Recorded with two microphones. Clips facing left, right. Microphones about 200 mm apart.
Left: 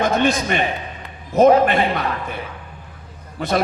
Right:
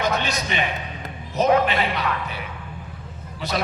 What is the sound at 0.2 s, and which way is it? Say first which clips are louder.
Speech: left 8 dB; 50° left (ahead or behind).